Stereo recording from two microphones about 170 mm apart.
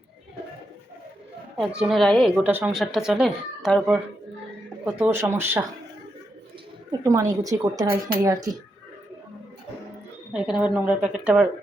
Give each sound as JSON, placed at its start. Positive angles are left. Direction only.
{"t": 1.5, "sound": "speech", "side_deg": -5}
{"t": 4.9, "sound": "speech", "side_deg": -10}
{"t": 7.0, "sound": "a woman's voice", "side_deg": -20}
{"t": 10.3, "sound": "speech", "side_deg": -5}